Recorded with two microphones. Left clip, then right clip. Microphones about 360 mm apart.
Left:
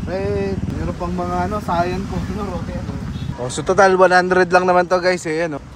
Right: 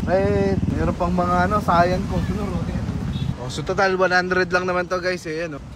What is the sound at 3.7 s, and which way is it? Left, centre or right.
A man's voice, centre.